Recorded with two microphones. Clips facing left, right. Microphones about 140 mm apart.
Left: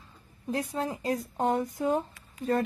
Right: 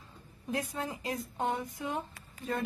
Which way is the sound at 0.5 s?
35° left (ahead or behind).